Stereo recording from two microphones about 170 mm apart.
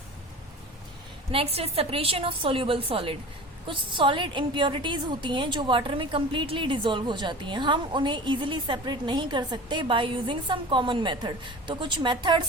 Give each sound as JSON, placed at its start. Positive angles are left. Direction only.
{"t": 1.3, "sound": "a woman's voice", "side_deg": -35}